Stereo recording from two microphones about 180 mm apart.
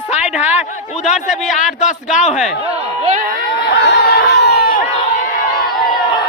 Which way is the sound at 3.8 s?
70° left (ahead or behind).